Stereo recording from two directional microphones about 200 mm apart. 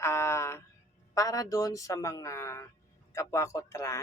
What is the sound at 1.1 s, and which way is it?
A woman's voice, 15° left (ahead or behind).